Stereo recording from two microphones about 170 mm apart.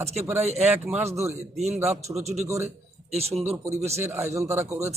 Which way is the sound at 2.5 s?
15° right (ahead or behind).